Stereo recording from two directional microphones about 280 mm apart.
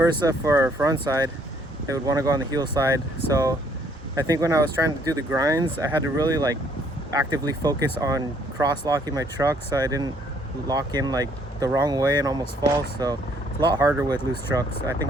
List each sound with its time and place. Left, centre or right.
0.0 s speech: centre
4.1 s speech: centre
13.6 s speech: centre